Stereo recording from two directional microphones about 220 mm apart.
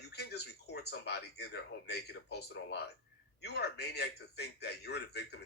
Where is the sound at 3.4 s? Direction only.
50° left (ahead or behind).